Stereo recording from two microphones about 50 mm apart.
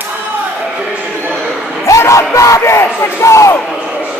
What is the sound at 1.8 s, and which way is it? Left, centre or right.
Music, left.